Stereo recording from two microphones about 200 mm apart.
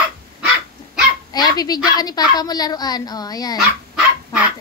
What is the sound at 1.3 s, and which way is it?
Dog, 20° left (ahead or behind).